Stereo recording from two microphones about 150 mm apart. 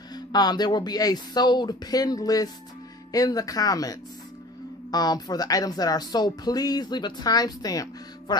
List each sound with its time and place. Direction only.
0.1 s speech: 25° left (ahead or behind)